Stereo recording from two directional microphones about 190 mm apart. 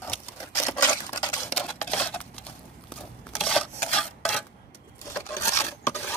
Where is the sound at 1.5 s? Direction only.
5° left (ahead or behind).